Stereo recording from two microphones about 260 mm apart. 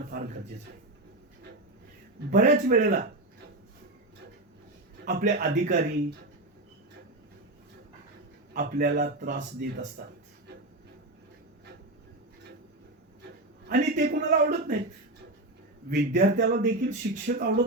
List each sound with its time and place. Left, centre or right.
2.3 s speech: right
5.0 s speech: right
8.5 s speech: right
13.7 s speech: right
15.9 s speech: right